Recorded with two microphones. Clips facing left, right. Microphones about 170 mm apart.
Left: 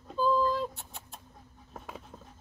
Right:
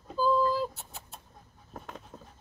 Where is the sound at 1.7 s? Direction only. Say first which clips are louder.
Right 1 dB; centre (ahead or behind).